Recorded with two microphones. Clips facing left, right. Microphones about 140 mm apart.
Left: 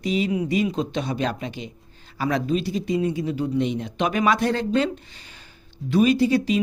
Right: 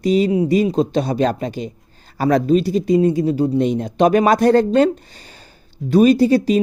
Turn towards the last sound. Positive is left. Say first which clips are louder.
# right 6 dB
turn(degrees=-40)  # may be behind; listen again after turning